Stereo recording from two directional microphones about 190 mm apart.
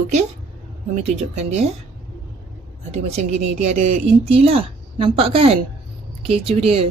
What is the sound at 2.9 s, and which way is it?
A woman's voice, 35° right (ahead or behind).